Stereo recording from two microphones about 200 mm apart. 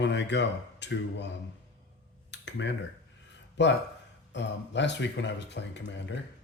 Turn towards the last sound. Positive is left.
turn(degrees=60)  # may be behind; listen again after turning